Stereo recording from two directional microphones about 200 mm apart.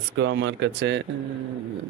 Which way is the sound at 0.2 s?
60° right (ahead or behind).